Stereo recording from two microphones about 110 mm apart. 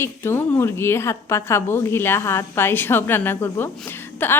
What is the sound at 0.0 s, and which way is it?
A woman's voice, 20° left (ahead or behind).